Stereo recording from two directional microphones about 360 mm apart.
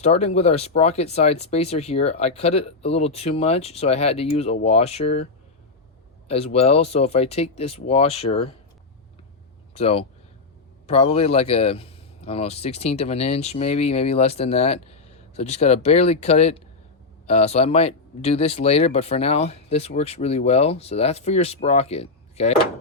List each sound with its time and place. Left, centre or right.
0.0 s speech: centre
9.7 s speech: centre